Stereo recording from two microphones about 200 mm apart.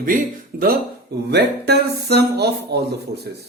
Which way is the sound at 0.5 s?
45° right (ahead or behind).